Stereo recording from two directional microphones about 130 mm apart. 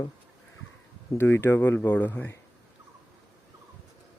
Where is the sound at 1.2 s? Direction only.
20° left (ahead or behind).